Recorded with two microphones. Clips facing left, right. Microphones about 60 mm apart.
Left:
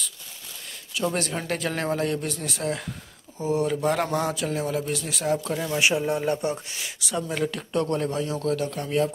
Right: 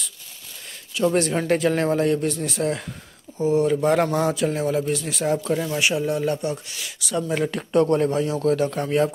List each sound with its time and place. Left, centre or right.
0.9 s speech: centre
1.3 s a man's voice: centre
3.7 s a man's voice: centre
5.8 s speech: centre
7.2 s speech: centre
8.7 s speech: right